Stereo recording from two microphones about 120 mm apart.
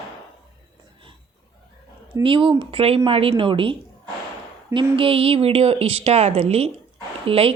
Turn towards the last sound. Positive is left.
turn(degrees=-50)  # may be behind; listen again after turning